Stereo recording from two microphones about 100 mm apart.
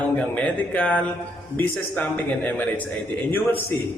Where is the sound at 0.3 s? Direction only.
15° left (ahead or behind).